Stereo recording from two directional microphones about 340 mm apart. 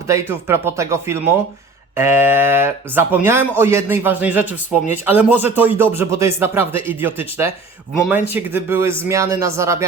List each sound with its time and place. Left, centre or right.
0.1 s a man's voice: centre